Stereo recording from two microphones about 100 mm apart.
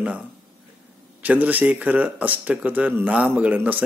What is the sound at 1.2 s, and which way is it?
Speech, 15° right (ahead or behind).